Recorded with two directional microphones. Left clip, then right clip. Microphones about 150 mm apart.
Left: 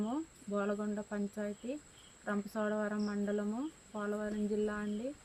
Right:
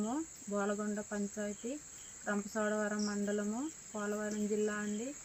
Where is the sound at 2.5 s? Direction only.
10° left (ahead or behind).